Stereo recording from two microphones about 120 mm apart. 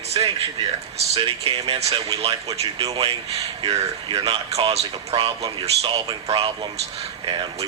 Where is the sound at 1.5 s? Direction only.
55° right (ahead or behind).